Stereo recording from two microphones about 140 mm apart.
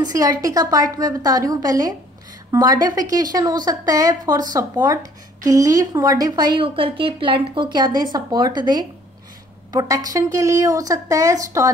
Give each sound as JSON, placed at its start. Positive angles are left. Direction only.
{"t": 0.0, "sound": "speech", "side_deg": -25}